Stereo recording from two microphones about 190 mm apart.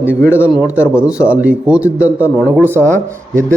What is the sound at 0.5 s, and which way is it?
A man's voice, 5° right (ahead or behind).